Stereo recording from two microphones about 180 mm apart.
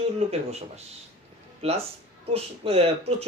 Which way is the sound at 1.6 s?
35° right (ahead or behind).